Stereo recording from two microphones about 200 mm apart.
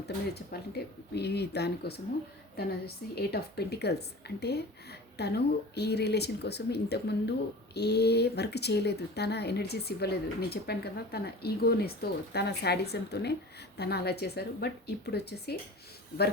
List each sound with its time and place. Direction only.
0.5 s a woman's voice: 50° left (ahead or behind)